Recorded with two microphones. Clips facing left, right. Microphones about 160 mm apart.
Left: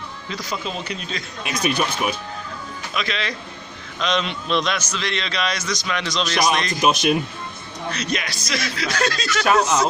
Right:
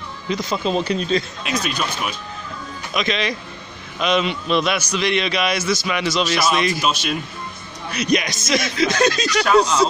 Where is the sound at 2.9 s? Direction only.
20° right (ahead or behind).